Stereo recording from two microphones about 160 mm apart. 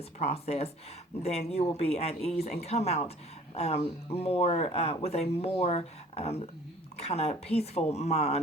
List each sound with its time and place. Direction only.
0.2 s speech: 40° left (ahead or behind)